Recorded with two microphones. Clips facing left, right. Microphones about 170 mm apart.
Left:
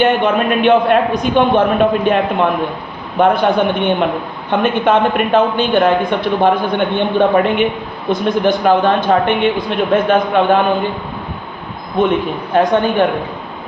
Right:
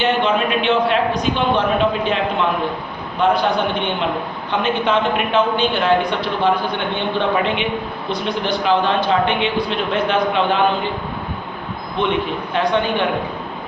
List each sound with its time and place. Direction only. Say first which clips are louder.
0.0 s speech: left 4 dB; 50° left (ahead or behind)
12.0 s speech: left 5 dB; 45° left (ahead or behind)